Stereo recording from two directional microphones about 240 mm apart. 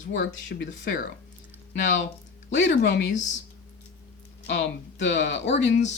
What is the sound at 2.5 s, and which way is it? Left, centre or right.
Speech, left.